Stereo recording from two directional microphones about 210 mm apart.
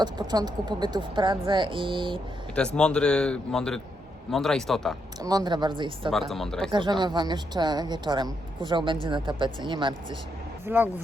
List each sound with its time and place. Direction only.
0.0 s a woman's voice: 20° right (ahead or behind)
2.7 s speech: 5° left (ahead or behind)
5.2 s a woman's voice: 20° right (ahead or behind)
6.1 s speech: centre (ahead or behind)
6.7 s a woman's voice: 20° right (ahead or behind)
10.7 s speech: 10° right (ahead or behind)